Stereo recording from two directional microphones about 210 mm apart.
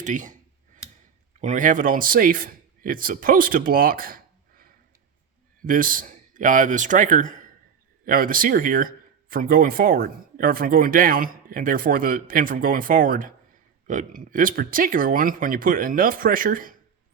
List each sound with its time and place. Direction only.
0.0 s computer keyboard: 35° right (ahead or behind)
1.4 s a man's voice: 35° right (ahead or behind)